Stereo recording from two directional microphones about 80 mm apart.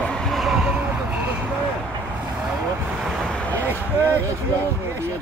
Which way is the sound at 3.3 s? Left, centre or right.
Centre.